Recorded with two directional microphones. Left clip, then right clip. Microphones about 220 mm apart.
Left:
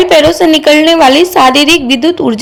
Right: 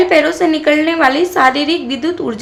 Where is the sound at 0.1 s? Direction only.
25° left (ahead or behind).